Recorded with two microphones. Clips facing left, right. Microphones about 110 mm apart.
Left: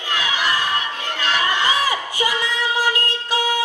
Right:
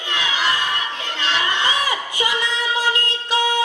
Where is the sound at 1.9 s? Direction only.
25° right (ahead or behind).